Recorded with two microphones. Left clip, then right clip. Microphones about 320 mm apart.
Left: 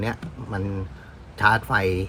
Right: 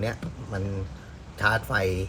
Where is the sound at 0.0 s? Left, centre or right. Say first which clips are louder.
Left 2 dB; centre.